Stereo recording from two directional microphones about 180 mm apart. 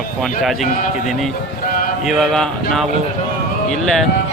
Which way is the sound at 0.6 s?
45° left (ahead or behind).